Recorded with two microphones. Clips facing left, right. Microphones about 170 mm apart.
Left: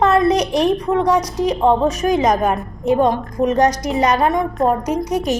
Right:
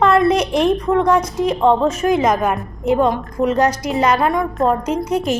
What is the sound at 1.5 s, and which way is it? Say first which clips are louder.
A woman's voice: even; 15° left (ahead or behind).